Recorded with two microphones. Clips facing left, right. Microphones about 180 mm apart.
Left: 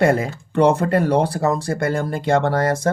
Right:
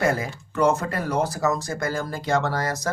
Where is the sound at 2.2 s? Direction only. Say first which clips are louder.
Left 5 dB; 55° left (ahead or behind).